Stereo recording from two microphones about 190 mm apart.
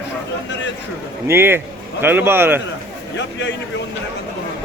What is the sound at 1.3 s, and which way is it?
A man's voice, 10° right (ahead or behind).